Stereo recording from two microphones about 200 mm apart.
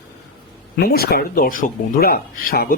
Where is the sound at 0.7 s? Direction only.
50° left (ahead or behind).